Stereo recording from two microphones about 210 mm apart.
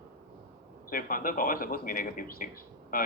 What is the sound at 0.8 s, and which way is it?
Speech, 40° left (ahead or behind).